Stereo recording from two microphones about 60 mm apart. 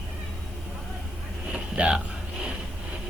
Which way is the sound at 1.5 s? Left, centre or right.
Centre.